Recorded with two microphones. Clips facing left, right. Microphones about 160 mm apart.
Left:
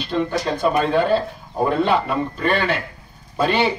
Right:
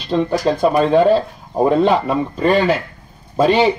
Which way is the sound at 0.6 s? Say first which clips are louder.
Right 4 dB; 35° right (ahead or behind).